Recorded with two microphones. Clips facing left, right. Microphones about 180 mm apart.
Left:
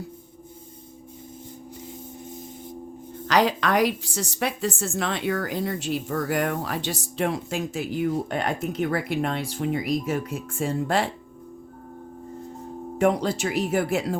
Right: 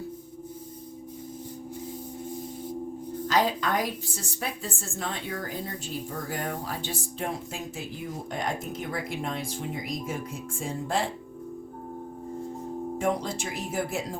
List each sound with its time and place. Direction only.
3.2 s a woman's voice: 75° left (ahead or behind)
13.0 s a woman's voice: 70° left (ahead or behind)